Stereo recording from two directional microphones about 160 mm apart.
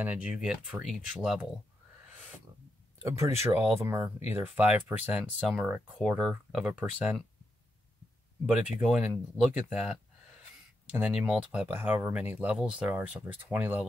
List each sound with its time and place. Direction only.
0.0 s speech: 10° right (ahead or behind)
3.0 s speech: 20° right (ahead or behind)
8.5 s speech: 5° right (ahead or behind)